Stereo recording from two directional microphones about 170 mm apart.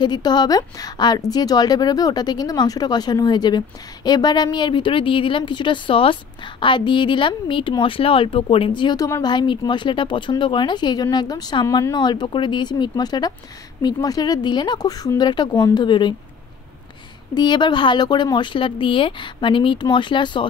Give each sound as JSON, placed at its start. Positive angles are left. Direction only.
{"t": 0.0, "sound": "a woman's voice", "side_deg": 25}
{"t": 17.3, "sound": "a woman's voice", "side_deg": 25}